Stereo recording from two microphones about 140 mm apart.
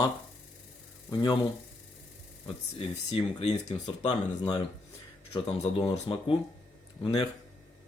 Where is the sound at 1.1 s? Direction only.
30° left (ahead or behind).